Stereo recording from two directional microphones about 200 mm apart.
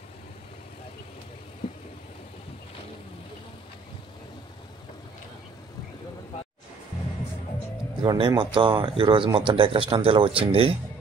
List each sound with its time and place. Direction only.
8.0 s speech: 20° right (ahead or behind)